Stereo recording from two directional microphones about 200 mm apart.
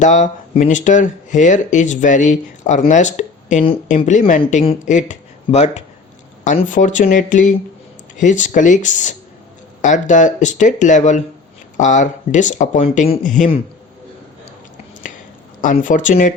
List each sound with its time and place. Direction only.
0.0 s speech: 35° left (ahead or behind)
15.6 s speech: 40° left (ahead or behind)